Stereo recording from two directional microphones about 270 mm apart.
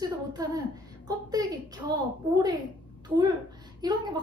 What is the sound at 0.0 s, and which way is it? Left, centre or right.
A woman's voice, centre.